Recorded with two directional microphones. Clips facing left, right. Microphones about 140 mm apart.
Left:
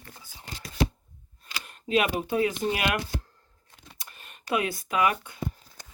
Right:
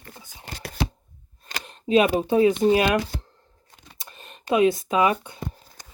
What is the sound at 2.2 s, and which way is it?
Speech, 25° right (ahead or behind).